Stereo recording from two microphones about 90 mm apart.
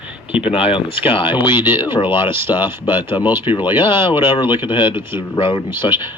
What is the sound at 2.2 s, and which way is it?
Speech, 25° right (ahead or behind).